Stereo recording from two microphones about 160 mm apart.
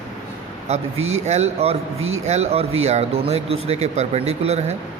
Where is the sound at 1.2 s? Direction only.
45° right (ahead or behind).